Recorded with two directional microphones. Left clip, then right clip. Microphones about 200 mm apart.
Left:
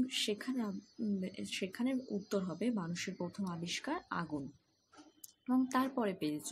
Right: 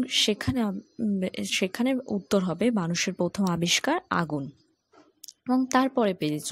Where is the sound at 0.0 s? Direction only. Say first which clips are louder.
Right 12 dB; 40° right (ahead or behind).